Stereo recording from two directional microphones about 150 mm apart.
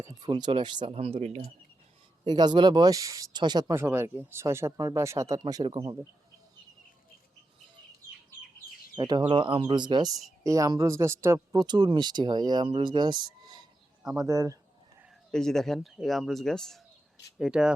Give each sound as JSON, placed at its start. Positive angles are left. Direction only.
{"t": 0.0, "sound": "speech", "side_deg": -30}
{"t": 2.2, "sound": "speech", "side_deg": -30}
{"t": 9.0, "sound": "speech", "side_deg": -30}
{"t": 14.0, "sound": "speech", "side_deg": -5}
{"t": 14.3, "sound": "speech", "side_deg": -20}
{"t": 15.3, "sound": "speech", "side_deg": 5}